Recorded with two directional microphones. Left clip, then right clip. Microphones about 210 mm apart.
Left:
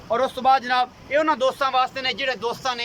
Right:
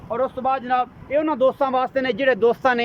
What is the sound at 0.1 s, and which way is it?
Speech, 10° right (ahead or behind).